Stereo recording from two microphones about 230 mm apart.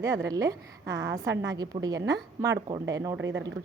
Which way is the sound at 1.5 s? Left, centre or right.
Centre.